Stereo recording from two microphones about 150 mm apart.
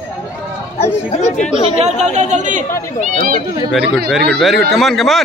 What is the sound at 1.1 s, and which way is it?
Speech, 50° left (ahead or behind).